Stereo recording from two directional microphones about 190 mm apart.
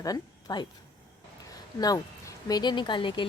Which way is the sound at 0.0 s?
20° left (ahead or behind).